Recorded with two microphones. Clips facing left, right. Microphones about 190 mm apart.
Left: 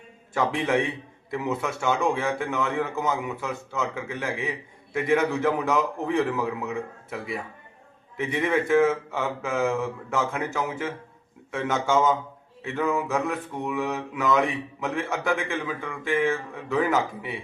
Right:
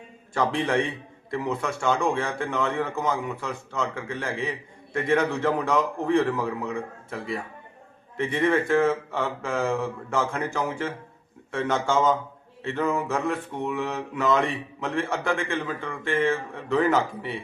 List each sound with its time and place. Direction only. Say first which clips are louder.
0.3 s a man's voice: even; 5° left (ahead or behind)